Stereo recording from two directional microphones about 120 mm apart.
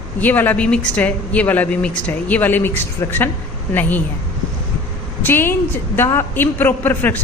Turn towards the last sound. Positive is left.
turn(degrees=15)  # may be behind; listen again after turning